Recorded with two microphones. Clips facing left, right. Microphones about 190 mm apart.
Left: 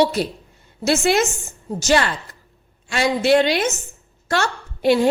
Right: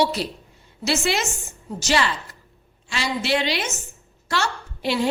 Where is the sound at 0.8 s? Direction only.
50° left (ahead or behind).